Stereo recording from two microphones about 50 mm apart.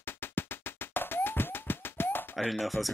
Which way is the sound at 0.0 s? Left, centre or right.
Left.